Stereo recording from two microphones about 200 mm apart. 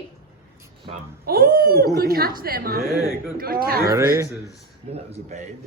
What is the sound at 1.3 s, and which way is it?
A man's voice, 50° right (ahead or behind).